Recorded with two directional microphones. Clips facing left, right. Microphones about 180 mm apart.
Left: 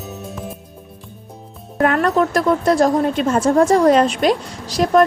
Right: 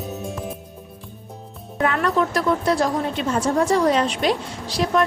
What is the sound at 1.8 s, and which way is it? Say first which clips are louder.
Speech: left 5 dB; 45° left (ahead or behind).